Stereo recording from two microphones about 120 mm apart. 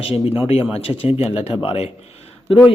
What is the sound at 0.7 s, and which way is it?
A man's voice, 55° left (ahead or behind).